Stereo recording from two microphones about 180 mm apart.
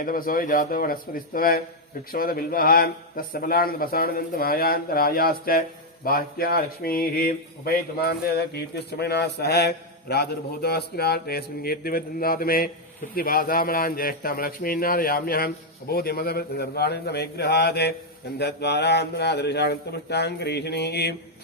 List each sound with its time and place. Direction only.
0.0 s a man's voice: 50° left (ahead or behind)